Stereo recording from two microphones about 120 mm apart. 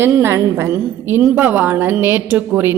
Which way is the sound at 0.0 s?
20° right (ahead or behind).